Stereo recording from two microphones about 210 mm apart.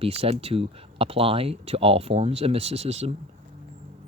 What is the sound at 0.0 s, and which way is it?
Speech, 25° right (ahead or behind).